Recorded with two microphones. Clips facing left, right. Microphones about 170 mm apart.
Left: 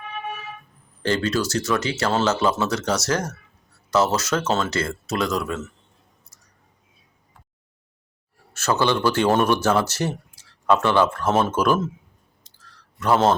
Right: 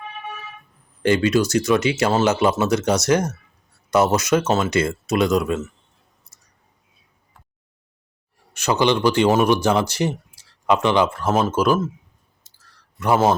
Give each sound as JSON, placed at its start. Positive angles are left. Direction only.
{"t": 1.0, "sound": "speech", "side_deg": -15}
{"t": 8.5, "sound": "speech", "side_deg": -15}
{"t": 12.5, "sound": "a sound", "side_deg": -10}